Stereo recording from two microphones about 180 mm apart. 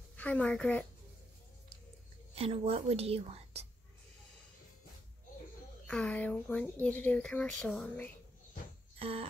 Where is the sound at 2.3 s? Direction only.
35° right (ahead or behind).